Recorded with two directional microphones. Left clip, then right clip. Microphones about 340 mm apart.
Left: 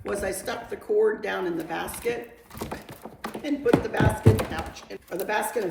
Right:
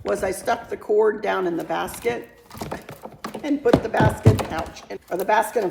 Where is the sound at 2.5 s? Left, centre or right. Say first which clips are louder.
Right 4 dB; centre.